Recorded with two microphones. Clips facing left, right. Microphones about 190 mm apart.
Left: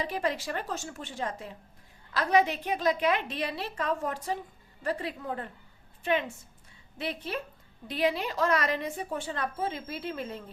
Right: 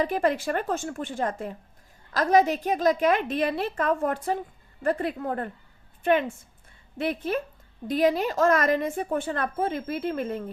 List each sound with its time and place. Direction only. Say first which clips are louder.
0.0 s a woman's voice: right 7 dB; 50° right (ahead or behind)